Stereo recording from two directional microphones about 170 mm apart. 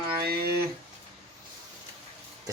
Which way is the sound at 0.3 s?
65° right (ahead or behind).